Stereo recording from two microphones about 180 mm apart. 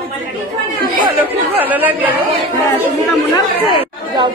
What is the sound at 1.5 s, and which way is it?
Speech, 10° right (ahead or behind).